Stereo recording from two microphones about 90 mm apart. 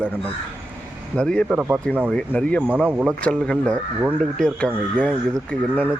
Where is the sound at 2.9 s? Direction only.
15° right (ahead or behind).